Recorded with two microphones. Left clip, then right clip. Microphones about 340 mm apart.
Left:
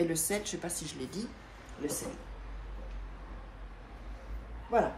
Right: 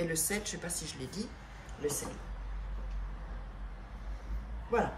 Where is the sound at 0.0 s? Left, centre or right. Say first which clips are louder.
Left 3 dB; centre.